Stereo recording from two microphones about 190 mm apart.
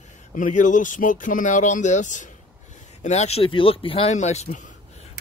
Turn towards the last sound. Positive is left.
turn(degrees=35)  # may be behind; listen again after turning